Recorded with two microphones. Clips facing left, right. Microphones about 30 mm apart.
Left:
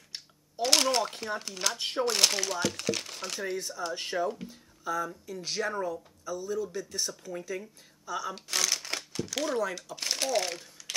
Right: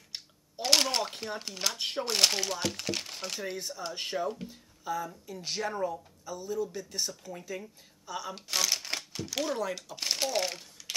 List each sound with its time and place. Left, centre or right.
0.1 s speech: centre
6.2 s speech: centre